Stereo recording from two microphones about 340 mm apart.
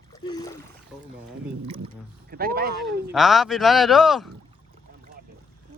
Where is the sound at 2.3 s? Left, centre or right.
Right.